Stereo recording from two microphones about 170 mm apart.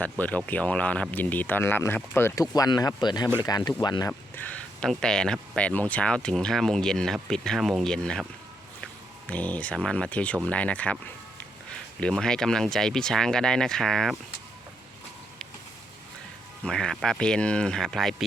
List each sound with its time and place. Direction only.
0.0 s speech: 10° left (ahead or behind); by 4.1 s 25° left (ahead or behind)
4.4 s speech: 5° left (ahead or behind)
11.9 s speech: 5° left (ahead or behind)
16.6 s speech: 5° left (ahead or behind)